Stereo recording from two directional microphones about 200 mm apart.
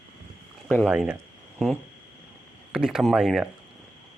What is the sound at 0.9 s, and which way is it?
Speech, 5° right (ahead or behind).